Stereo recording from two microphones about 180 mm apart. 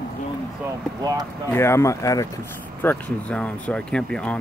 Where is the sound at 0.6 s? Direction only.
20° right (ahead or behind).